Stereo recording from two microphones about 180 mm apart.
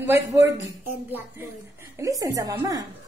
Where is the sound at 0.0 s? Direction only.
15° right (ahead or behind).